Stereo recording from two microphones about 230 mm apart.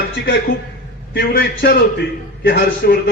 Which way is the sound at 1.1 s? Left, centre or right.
Left.